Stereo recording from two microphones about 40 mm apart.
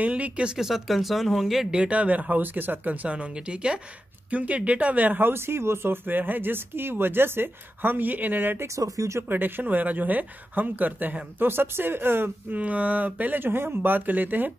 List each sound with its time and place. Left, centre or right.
0.0 s a sound: right
0.6 s speech: centre
1.7 s speech: right
3.3 s speech: right
4.3 s speech: right
5.3 s speech: right
6.0 s a woman's voice: right
11.3 s speech: right
12.4 s speech: right
13.4 s speech: right